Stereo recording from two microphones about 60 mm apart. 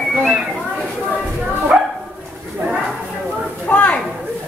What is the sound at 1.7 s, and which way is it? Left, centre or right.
Dog, right.